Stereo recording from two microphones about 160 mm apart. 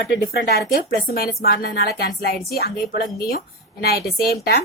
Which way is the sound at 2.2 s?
70° left (ahead or behind).